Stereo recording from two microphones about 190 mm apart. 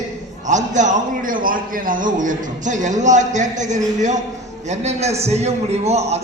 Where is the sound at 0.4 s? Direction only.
40° right (ahead or behind).